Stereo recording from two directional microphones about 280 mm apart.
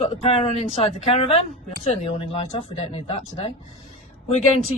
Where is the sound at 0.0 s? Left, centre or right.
Left.